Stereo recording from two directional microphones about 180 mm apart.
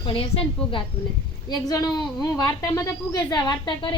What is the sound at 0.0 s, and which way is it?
Speech, 30° left (ahead or behind).